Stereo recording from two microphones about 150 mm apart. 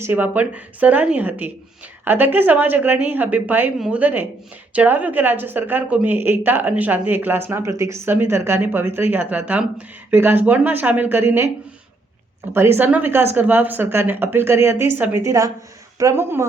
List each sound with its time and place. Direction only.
0.0 s speech: 10° right (ahead or behind)
12.5 s speech: 15° right (ahead or behind)